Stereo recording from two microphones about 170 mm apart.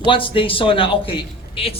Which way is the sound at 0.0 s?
30° left (ahead or behind).